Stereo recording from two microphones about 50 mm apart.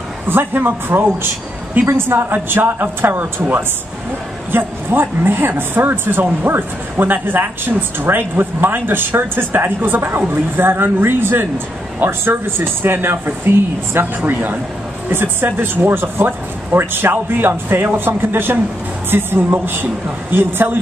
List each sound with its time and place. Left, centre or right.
0.3 s speech: right